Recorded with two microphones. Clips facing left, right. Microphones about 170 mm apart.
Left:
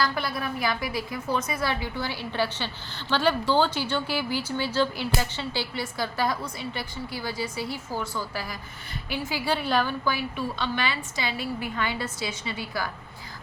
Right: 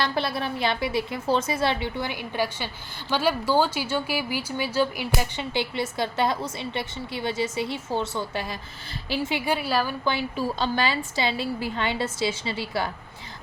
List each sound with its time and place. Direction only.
0.0 s speech: 30° right (ahead or behind)
9.5 s a woman's voice: 10° right (ahead or behind)
10.0 s speech: 25° right (ahead or behind)